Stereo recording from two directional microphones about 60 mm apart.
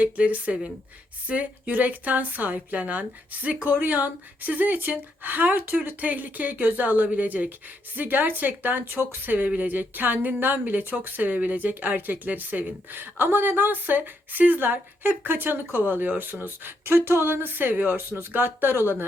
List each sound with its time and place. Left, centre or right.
0.0 s a woman's voice: right